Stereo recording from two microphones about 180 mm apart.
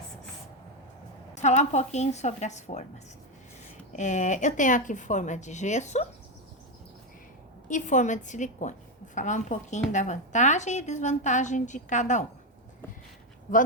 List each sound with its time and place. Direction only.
1.4 s a woman's voice: 40° left (ahead or behind)
3.9 s a woman's voice: 40° left (ahead or behind)
7.7 s a woman's voice: 45° left (ahead or behind)
13.5 s a woman's voice: 45° left (ahead or behind)